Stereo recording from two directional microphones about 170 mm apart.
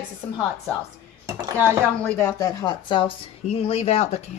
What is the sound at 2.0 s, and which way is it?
Speech, 15° left (ahead or behind).